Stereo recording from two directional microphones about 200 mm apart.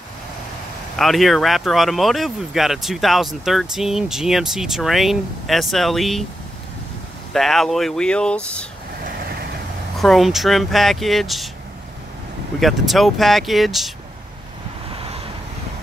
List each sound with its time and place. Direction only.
0.9 s speech: centre (ahead or behind)
7.3 s speech: centre (ahead or behind)
9.0 s vehicle: 50° right (ahead or behind)
9.9 s speech: centre (ahead or behind)
12.5 s speech: centre (ahead or behind)
14.9 s vehicle: 30° right (ahead or behind)